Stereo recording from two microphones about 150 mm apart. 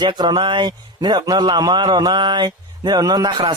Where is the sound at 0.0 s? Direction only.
30° right (ahead or behind).